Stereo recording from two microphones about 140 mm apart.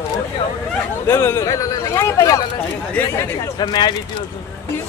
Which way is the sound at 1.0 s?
15° left (ahead or behind).